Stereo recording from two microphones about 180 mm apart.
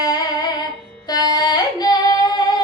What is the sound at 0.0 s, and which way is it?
Music, 20° left (ahead or behind).